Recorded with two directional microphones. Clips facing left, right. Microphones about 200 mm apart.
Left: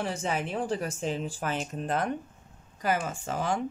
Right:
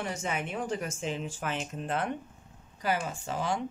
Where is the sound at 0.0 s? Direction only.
30° left (ahead or behind); by 3.5 s 45° left (ahead or behind).